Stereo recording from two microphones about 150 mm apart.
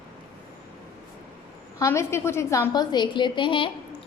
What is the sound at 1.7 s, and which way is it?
A woman's voice, 20° left (ahead or behind).